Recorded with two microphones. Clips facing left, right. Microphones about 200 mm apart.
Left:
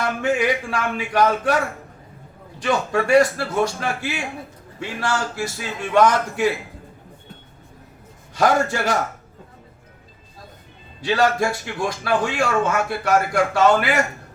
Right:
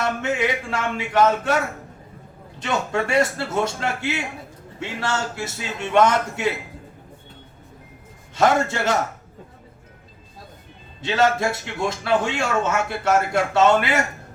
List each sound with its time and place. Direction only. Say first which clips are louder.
0.0 s a man's voice: left 2 dB; 25° right (ahead or behind)
2.6 s a man's voice: left 3 dB; 25° right (ahead or behind)
8.4 s a man's voice: even; 25° right (ahead or behind)
11.0 s a man's voice: left 1 dB; 25° right (ahead or behind)